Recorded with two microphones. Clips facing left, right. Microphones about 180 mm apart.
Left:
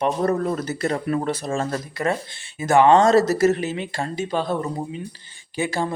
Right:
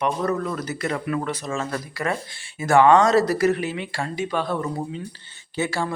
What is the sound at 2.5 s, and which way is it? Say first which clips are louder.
Speech: left 1 dB; 20° left (ahead or behind).